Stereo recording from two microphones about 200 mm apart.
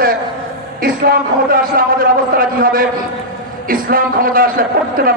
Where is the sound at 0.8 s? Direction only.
45° right (ahead or behind).